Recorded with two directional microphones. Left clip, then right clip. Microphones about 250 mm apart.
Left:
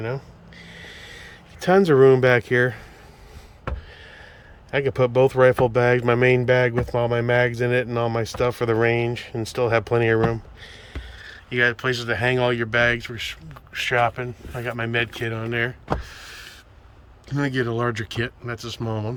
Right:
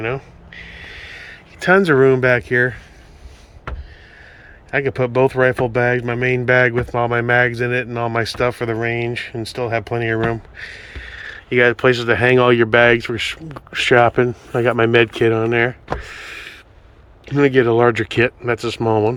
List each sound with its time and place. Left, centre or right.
0.0 s speech: centre
4.7 s speech: centre
17.2 s speech: centre